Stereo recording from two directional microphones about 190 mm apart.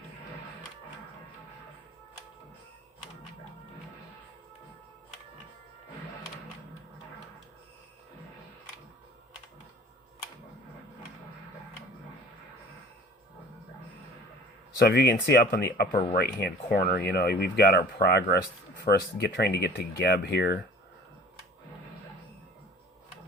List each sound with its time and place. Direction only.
14.8 s speech: 55° left (ahead or behind)